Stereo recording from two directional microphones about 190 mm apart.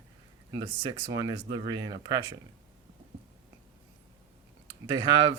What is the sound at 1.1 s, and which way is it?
Speech, 20° right (ahead or behind).